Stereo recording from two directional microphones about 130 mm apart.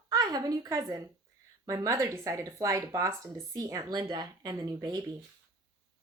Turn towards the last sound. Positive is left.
turn(degrees=-35)  # may be behind; listen again after turning